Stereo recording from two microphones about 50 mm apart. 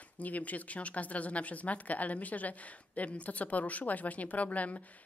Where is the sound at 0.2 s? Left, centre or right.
Left.